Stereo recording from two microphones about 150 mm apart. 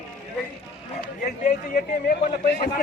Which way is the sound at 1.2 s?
70° left (ahead or behind).